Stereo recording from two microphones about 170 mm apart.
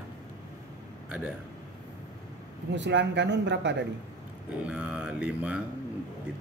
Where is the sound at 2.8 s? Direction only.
90° right.